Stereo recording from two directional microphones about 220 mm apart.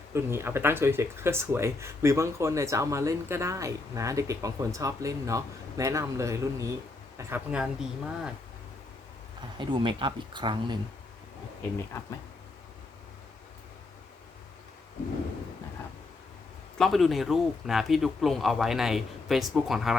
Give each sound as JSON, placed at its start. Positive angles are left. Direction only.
{"t": 0.1, "sound": "speech", "side_deg": -10}
{"t": 9.6, "sound": "speech", "side_deg": -20}
{"t": 16.7, "sound": "speech", "side_deg": 0}